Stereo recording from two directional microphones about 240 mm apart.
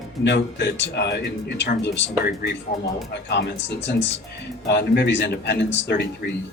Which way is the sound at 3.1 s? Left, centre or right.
Left.